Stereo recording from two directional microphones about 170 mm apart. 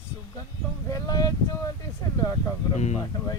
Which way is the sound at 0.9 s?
20° left (ahead or behind).